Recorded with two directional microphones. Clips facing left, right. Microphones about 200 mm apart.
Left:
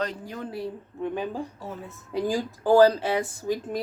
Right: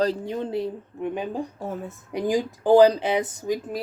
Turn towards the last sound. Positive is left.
turn(degrees=-20)  # may be behind; listen again after turning